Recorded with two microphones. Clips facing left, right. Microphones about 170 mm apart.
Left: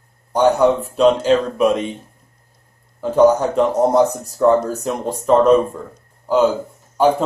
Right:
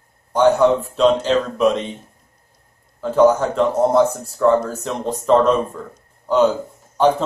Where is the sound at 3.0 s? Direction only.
15° left (ahead or behind).